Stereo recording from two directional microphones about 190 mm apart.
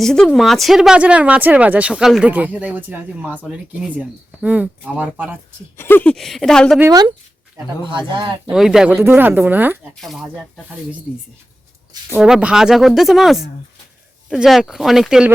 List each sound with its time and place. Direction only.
0.0 s speech: 5° left (ahead or behind)
5.7 s speech: 10° left (ahead or behind)
6.7 s speech: 15° right (ahead or behind)
8.4 s speech: centre (ahead or behind)
12.1 s speech: 5° right (ahead or behind)